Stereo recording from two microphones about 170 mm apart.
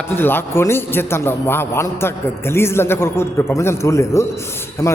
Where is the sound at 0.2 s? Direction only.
10° left (ahead or behind).